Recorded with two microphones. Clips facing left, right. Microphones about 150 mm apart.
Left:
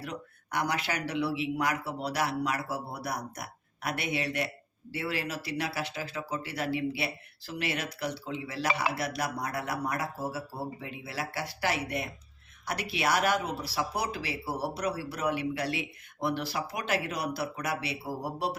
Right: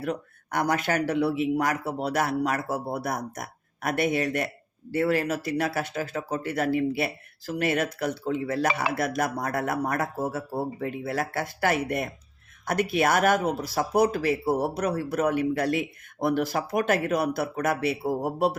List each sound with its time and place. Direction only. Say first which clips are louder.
0.0 s speech: right 9 dB; 50° right (ahead or behind)